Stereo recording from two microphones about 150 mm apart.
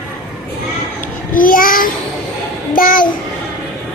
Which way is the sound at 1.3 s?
70° left (ahead or behind).